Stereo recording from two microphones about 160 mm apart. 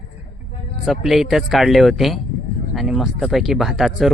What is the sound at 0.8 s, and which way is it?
Speech, centre (ahead or behind).